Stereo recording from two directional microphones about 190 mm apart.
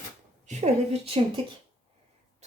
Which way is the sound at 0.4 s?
35° right (ahead or behind).